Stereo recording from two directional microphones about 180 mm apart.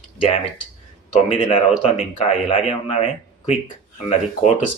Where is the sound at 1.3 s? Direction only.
40° left (ahead or behind).